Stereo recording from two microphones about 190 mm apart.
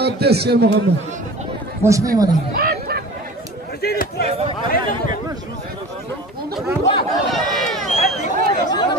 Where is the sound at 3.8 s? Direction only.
50° left (ahead or behind).